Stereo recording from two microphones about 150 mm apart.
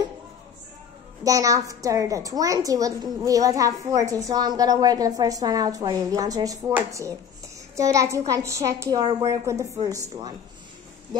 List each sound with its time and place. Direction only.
1.2 s a woman's voice: 20° right (ahead or behind)